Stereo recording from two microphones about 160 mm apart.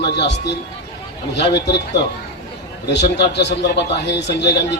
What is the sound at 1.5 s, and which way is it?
A man's voice, 90° left.